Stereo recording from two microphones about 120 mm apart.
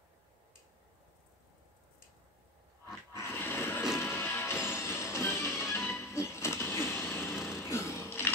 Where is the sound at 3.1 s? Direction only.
20° left (ahead or behind).